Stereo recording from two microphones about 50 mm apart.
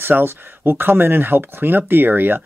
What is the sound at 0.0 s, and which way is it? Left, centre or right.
Speech, right.